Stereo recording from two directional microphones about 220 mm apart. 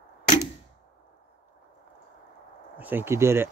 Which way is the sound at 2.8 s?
10° right (ahead or behind).